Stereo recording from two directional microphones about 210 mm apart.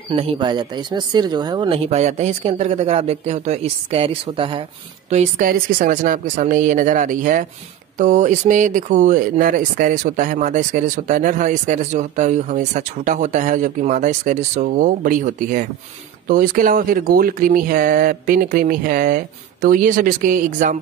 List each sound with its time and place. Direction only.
0.1 s speech: 25° right (ahead or behind)
5.1 s speech: 35° right (ahead or behind)